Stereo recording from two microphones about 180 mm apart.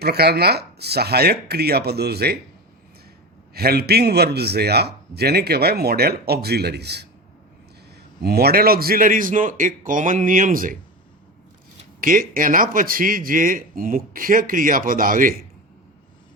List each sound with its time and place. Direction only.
0.0 s a man's voice: 60° right (ahead or behind)
3.5 s a man's voice: 60° right (ahead or behind)
8.2 s a man's voice: 60° right (ahead or behind)
11.9 s a man's voice: 50° right (ahead or behind)